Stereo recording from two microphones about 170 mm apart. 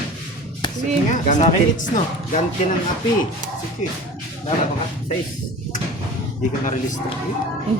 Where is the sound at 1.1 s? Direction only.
45° left (ahead or behind).